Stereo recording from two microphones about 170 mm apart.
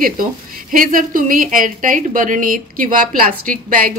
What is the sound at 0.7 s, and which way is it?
Speech, 55° right (ahead or behind).